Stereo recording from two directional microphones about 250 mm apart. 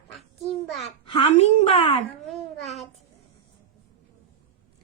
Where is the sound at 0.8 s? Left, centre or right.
Left.